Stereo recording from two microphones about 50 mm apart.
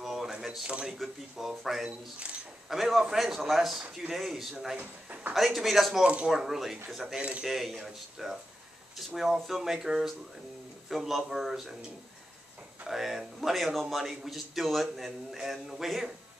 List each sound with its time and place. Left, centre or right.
0.0 s a sound: centre
0.9 s a man's voice: centre
1.9 s speech: right
2.7 s a man's voice: centre
7.2 s speech: right
7.4 s a man's voice: centre
12.8 s a man's voice: centre